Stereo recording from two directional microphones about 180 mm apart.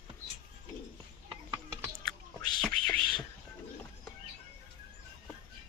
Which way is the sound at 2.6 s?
5° left (ahead or behind).